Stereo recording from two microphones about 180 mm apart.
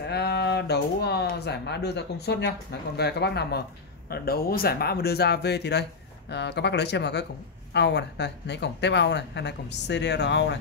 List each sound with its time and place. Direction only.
0.0 s speech: 65° left (ahead or behind)